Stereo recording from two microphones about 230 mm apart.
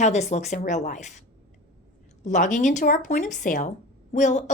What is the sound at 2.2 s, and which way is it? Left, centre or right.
Speech, left.